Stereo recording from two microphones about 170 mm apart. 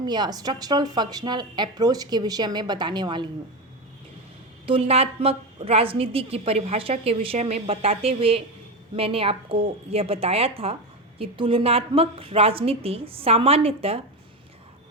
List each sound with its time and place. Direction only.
0.0 s speech: 25° right (ahead or behind)
4.6 s a woman's voice: 35° right (ahead or behind)